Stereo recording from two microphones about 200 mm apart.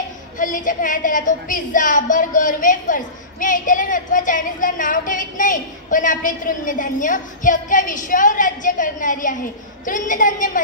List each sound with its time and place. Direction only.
0.4 s a woman's voice: 40° left (ahead or behind)